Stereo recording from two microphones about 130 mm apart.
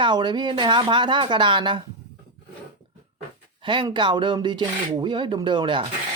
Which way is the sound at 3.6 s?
40° right (ahead or behind).